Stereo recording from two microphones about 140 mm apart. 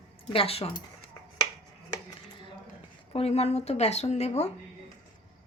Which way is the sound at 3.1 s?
50° left (ahead or behind).